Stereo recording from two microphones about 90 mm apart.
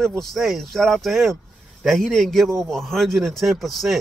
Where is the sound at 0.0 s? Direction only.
5° left (ahead or behind).